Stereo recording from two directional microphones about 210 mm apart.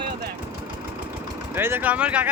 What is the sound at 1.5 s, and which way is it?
Speech, 10° right (ahead or behind).